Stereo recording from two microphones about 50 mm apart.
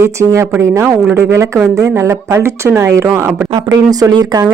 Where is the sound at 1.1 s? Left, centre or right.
Right.